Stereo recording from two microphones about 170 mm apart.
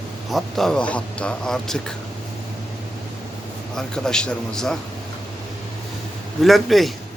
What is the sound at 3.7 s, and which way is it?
A man's voice, 5° left (ahead or behind).